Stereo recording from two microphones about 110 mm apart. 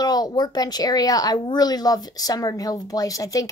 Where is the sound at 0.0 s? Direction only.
40° left (ahead or behind).